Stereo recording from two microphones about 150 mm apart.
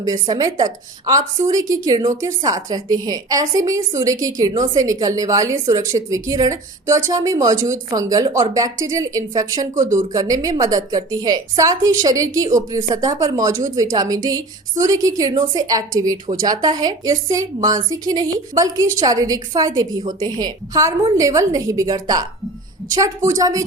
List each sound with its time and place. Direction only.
0.0 s a woman's voice: 25° right (ahead or behind)